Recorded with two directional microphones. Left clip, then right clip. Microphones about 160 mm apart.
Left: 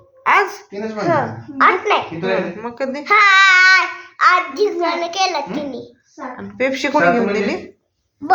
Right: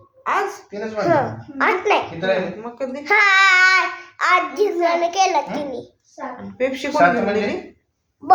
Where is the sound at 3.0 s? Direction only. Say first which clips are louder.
Left 3 dB; 20° right (ahead or behind).